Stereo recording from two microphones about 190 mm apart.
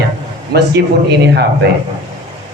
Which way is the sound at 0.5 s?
55° right (ahead or behind).